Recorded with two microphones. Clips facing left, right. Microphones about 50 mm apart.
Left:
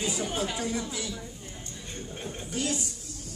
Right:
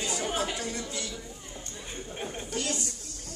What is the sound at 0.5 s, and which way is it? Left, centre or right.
Speech, centre.